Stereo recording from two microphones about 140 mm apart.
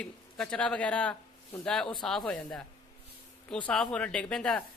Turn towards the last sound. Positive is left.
turn(degrees=5)  # may be behind; listen again after turning